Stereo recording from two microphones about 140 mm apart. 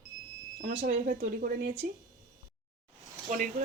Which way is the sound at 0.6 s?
75° right (ahead or behind).